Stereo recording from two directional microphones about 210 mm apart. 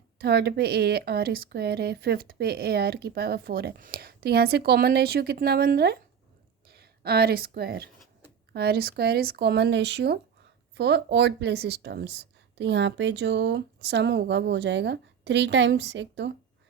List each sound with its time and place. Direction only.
0.2 s speech: 50° right (ahead or behind)